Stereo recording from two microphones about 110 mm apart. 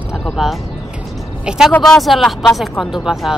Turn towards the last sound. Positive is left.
turn(degrees=-5)  # may be behind; listen again after turning